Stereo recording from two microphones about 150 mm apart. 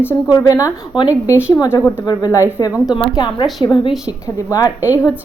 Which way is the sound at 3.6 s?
30° left (ahead or behind).